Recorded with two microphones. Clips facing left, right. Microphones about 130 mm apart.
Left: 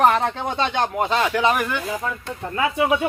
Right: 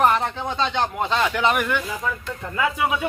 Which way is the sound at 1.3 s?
35° left (ahead or behind).